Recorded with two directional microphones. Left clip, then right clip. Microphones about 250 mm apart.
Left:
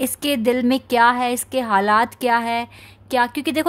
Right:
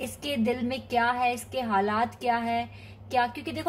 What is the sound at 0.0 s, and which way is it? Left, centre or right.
A woman's voice, left.